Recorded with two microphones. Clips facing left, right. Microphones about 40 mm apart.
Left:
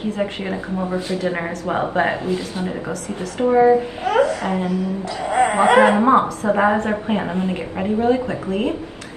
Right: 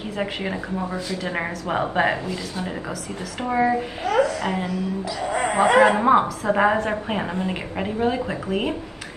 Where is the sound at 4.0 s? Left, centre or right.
Left.